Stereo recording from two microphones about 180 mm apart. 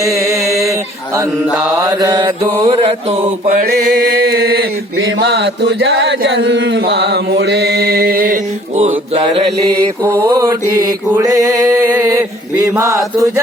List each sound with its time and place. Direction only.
2.0 s mantra: 20° right (ahead or behind)
4.3 s mantra: 60° right (ahead or behind)
5.2 s chant: 70° right (ahead or behind); by 8.4 s 55° right (ahead or behind)
8.7 s mantra: 35° right (ahead or behind)
10.2 s mantra: 20° right (ahead or behind)
12.7 s chant: 15° right (ahead or behind)